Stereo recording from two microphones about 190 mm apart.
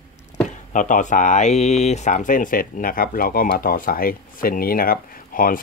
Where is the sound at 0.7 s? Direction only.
40° left (ahead or behind).